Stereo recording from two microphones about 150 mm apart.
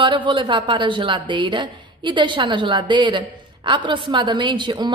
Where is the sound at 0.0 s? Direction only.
30° right (ahead or behind).